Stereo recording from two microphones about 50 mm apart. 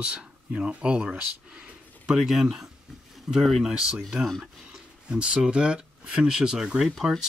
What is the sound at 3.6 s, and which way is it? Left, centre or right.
Speech, centre.